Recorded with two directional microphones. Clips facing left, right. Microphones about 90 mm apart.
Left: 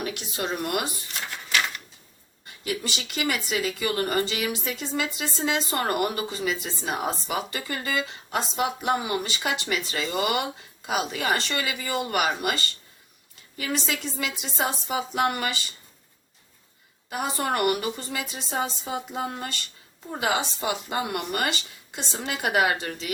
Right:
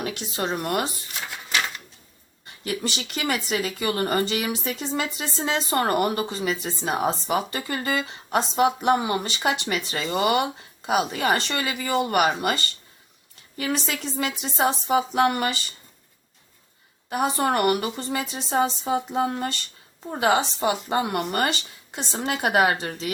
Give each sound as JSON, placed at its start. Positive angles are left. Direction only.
{"t": 0.0, "sound": "a woman's voice", "side_deg": -30}
{"t": 1.3, "sound": "a sound", "side_deg": -5}
{"t": 2.6, "sound": "a woman's voice", "side_deg": -30}
{"t": 17.1, "sound": "a woman's voice", "side_deg": -30}